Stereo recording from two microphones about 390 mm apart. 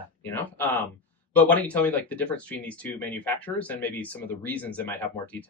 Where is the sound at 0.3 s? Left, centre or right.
Centre.